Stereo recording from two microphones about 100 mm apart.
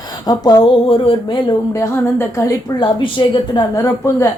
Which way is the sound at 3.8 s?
30° left (ahead or behind).